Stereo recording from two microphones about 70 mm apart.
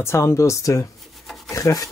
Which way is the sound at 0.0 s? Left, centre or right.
Left.